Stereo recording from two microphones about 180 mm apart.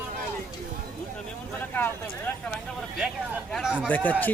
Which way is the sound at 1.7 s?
10° left (ahead or behind).